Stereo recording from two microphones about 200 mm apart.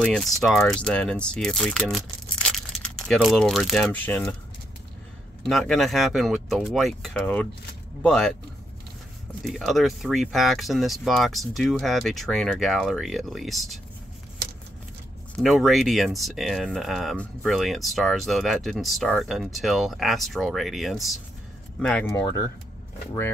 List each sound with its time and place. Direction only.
0.0 s speech: centre (ahead or behind)
5.4 s speech: centre (ahead or behind)
9.4 s speech: centre (ahead or behind)
15.4 s speech: centre (ahead or behind)
22.1 s speech: 15° left (ahead or behind)